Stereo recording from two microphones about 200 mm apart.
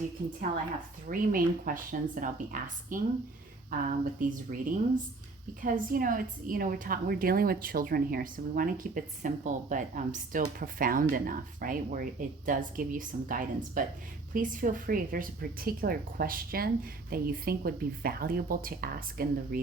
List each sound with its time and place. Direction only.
1.0 s a woman's voice: 45° right (ahead or behind)